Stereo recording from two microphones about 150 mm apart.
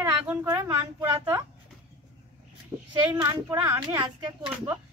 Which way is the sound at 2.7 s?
20° right (ahead or behind).